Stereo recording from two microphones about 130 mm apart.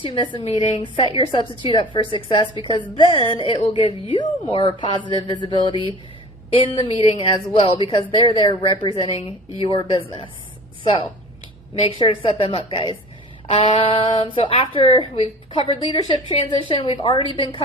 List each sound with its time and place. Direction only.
0.0 s a woman's voice: 40° left (ahead or behind)
11.8 s a woman's voice: 45° left (ahead or behind)